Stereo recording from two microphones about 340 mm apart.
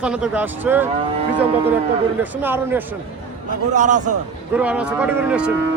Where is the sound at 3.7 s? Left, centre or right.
Right.